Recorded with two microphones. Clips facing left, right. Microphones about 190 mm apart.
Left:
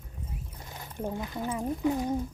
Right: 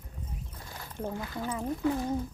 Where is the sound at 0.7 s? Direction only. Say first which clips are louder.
Left 2 dB; 15° left (ahead or behind).